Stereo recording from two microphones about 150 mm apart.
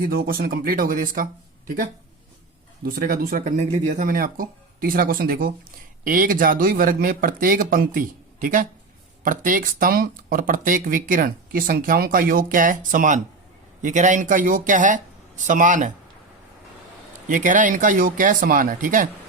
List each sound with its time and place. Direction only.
0.0 s speech: 80° right
3.6 s speech: 55° right (ahead or behind)
17.2 s speech: 60° right (ahead or behind)